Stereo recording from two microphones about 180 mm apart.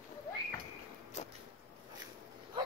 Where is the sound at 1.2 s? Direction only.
40° left (ahead or behind).